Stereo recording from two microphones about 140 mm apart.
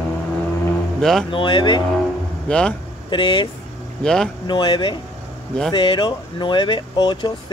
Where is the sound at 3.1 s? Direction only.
35° left (ahead or behind).